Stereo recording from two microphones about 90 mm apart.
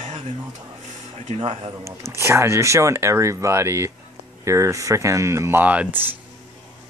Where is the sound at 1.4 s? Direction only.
90° right.